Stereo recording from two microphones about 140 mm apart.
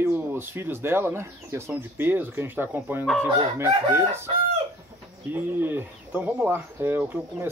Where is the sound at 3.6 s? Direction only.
20° right (ahead or behind).